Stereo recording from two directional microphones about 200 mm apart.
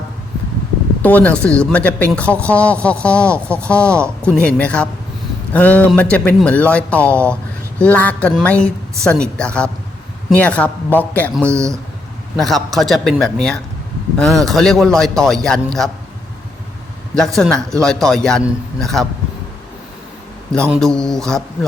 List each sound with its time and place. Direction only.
1.0 s speech: 5° left (ahead or behind)
11.5 s speech: 15° right (ahead or behind)
12.4 s speech: centre (ahead or behind)
17.2 s speech: centre (ahead or behind)
20.7 s speech: centre (ahead or behind)